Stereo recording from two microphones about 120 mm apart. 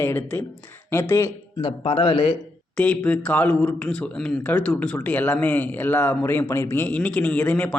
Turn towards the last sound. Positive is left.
turn(degrees=10)  # may be behind; listen again after turning